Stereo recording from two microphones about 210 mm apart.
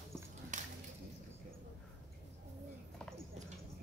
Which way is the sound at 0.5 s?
35° right (ahead or behind).